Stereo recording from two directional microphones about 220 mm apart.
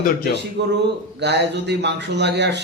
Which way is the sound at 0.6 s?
50° right (ahead or behind).